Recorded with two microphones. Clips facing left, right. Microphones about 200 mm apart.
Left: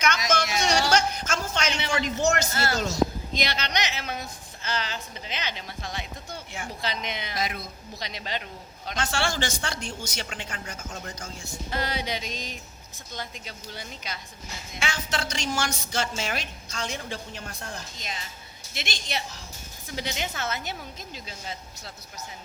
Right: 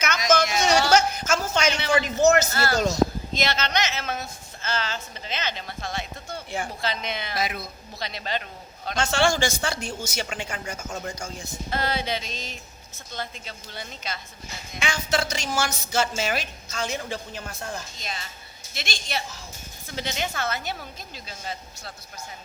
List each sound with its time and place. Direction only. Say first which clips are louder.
0.0 s a sound: right 3 dB; 5° right (ahead or behind)
3.3 s a woman's voice: right 3 dB; 15° left (ahead or behind)
7.3 s speech: right 2 dB; 5° right (ahead or behind)
7.9 s a woman's voice: right 3 dB; 15° left (ahead or behind)
9.0 s a woman's voice: right 6 dB; 20° right (ahead or behind)
11.7 s a woman's voice: right 3 dB; 15° left (ahead or behind)
14.8 s a woman's voice: right 5 dB; 10° right (ahead or behind)
18.7 s a woman's voice: right 1 dB; 20° left (ahead or behind)